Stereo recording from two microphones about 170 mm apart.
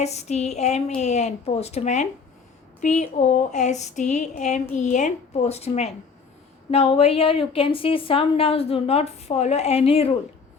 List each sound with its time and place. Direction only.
0.0 s a woman's voice: 40° left (ahead or behind)
2.8 s a sound: 45° left (ahead or behind)
4.7 s a woman's voice: 45° left (ahead or behind)